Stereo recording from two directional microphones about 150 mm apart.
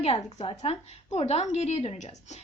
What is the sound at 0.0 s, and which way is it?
A woman's voice, 40° left (ahead or behind).